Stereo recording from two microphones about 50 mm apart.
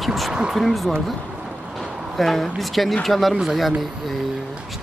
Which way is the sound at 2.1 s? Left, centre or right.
Centre.